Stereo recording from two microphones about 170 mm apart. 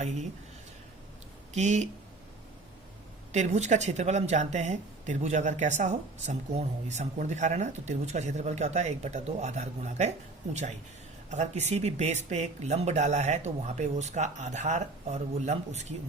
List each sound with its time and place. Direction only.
1.5 s a woman's voice: 40° right (ahead or behind)
3.3 s a woman's voice: 40° right (ahead or behind)